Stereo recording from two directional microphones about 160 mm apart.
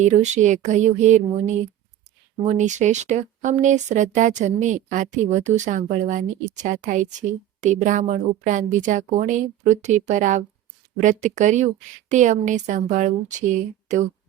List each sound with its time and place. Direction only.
0.0 s speech: 45° right (ahead or behind)